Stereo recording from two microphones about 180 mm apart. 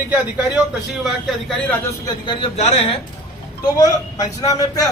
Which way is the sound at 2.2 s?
25° left (ahead or behind).